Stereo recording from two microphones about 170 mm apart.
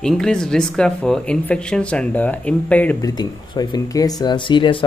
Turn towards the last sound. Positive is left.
turn(degrees=30)  # may be behind; listen again after turning